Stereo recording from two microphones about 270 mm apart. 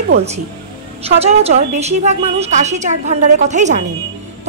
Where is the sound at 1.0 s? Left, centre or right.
Right.